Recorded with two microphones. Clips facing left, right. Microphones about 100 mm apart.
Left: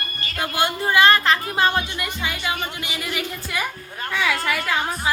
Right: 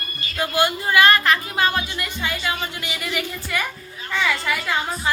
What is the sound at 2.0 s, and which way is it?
Speech, 15° left (ahead or behind).